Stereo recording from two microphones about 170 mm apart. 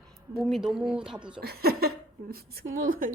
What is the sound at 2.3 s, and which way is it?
Speech, 60° right (ahead or behind).